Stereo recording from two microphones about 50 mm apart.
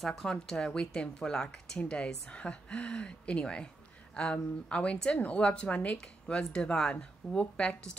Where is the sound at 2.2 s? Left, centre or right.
Left.